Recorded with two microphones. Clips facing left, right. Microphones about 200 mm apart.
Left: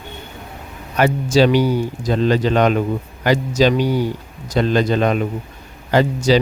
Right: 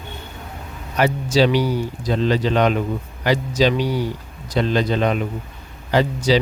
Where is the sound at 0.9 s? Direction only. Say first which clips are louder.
Left 3 dB; 50° left (ahead or behind).